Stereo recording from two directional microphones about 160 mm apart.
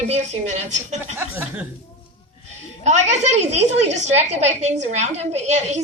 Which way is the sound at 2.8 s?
45° right (ahead or behind).